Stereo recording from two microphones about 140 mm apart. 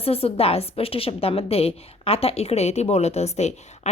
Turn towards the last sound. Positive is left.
turn(degrees=50)  # may be behind; listen again after turning